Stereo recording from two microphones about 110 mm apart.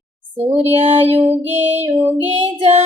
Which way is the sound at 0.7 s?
55° right (ahead or behind).